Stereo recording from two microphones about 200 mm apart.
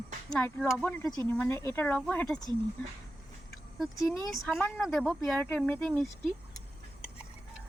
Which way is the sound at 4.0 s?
15° left (ahead or behind).